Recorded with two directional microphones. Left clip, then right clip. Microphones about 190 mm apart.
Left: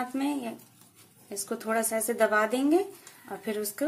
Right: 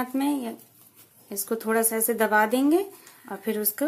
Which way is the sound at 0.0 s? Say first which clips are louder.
Right 4 dB; 25° right (ahead or behind).